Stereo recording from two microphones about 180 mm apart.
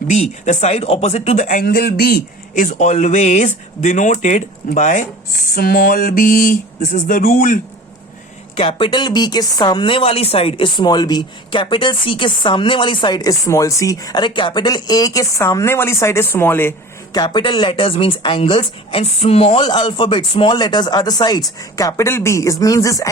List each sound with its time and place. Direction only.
0.1 s speech: 40° left (ahead or behind)
1.5 s speech: 55° left (ahead or behind)
2.6 s speech: 45° left (ahead or behind)
8.5 s speech: 30° left (ahead or behind); by 16.7 s 10° left (ahead or behind)
17.2 s speech: 25° left (ahead or behind)